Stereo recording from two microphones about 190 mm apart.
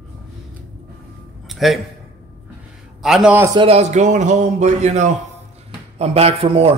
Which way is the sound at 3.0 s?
Centre (ahead or behind).